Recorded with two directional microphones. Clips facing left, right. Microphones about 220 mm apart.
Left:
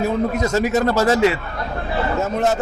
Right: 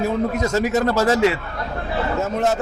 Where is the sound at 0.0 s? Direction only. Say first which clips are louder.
Left 1 dB; 20° left (ahead or behind).